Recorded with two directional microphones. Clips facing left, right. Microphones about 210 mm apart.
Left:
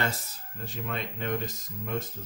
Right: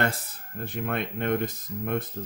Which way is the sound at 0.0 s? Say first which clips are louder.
Right 4 dB; 55° right (ahead or behind).